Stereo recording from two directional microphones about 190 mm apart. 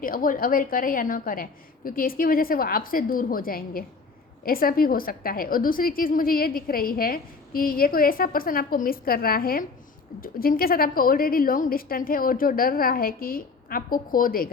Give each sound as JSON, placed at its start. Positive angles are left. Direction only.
{"t": 0.0, "sound": "a woman's voice", "side_deg": 45}